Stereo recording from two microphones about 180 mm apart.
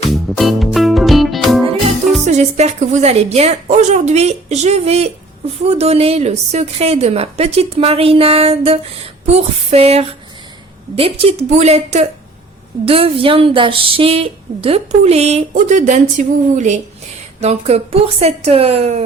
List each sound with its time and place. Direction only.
0.1 s music: centre (ahead or behind)
2.2 s speech: 40° right (ahead or behind)